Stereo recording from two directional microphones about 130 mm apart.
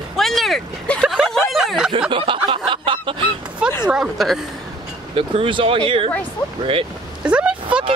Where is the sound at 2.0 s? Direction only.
40° right (ahead or behind).